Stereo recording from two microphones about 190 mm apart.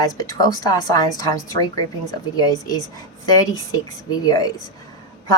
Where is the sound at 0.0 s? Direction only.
20° left (ahead or behind).